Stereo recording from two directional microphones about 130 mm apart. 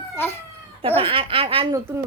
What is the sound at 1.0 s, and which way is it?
Speech, 45° right (ahead or behind).